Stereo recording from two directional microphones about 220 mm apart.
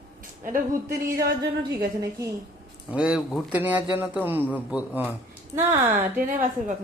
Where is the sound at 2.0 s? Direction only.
15° right (ahead or behind).